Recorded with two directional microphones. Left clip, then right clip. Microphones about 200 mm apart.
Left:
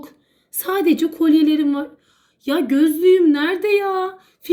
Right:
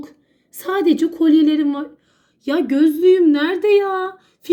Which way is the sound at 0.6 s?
20° right (ahead or behind).